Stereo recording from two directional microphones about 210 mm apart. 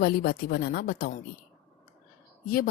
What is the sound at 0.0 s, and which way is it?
A woman's voice, 45° left (ahead or behind).